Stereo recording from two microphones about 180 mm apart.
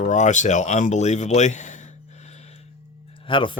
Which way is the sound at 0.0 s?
40° left (ahead or behind).